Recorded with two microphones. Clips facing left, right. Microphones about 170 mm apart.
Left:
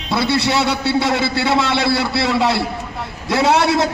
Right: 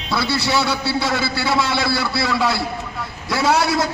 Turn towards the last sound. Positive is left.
turn(degrees=25)  # may be behind; listen again after turning